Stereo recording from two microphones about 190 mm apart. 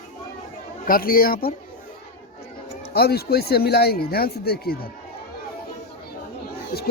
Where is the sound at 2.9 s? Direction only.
55° left (ahead or behind).